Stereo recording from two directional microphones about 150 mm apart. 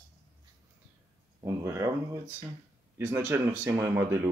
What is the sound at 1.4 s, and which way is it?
Speech, 15° right (ahead or behind).